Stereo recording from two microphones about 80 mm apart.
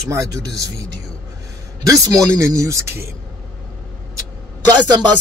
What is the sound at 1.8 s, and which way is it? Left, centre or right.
Speech, right.